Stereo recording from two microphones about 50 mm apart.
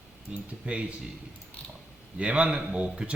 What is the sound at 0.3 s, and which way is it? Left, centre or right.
Speech, centre.